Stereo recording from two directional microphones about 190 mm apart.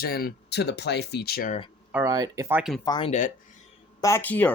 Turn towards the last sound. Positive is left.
turn(degrees=10)  # may be behind; listen again after turning